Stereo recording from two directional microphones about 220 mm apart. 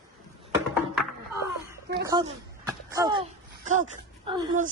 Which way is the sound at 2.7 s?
15° right (ahead or behind).